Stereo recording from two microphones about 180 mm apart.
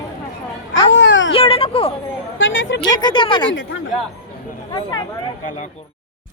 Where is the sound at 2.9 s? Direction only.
25° left (ahead or behind).